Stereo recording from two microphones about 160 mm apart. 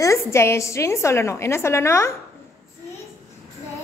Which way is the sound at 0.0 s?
20° left (ahead or behind).